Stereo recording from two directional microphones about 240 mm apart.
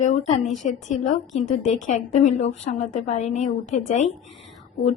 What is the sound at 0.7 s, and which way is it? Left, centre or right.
A woman's voice, left.